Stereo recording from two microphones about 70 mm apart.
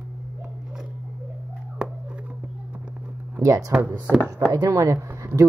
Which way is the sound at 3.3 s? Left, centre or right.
Right.